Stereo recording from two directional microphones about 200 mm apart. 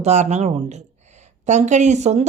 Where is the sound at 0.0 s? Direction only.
35° right (ahead or behind).